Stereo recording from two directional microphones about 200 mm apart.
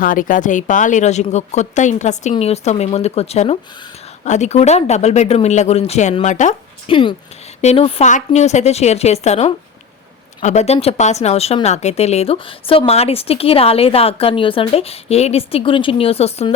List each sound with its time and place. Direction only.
0.0 s a woman's voice: 45° left (ahead or behind)